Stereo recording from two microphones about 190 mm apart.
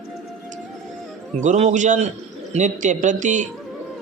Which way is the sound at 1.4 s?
35° right (ahead or behind).